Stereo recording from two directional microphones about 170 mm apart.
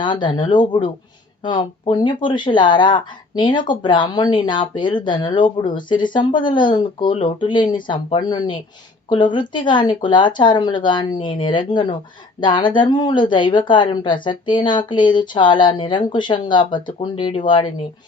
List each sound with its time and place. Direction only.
0.0 s speech: 30° left (ahead or behind)